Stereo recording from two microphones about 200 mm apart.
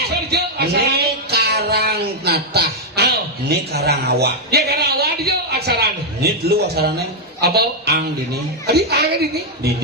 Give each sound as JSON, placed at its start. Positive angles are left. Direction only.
{"t": 0.3, "sound": "music", "side_deg": -55}
{"t": 7.4, "sound": "a woman's voice", "side_deg": -55}